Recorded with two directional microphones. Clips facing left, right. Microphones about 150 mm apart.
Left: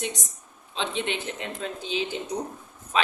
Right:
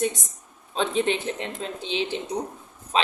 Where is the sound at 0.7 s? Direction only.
40° right (ahead or behind).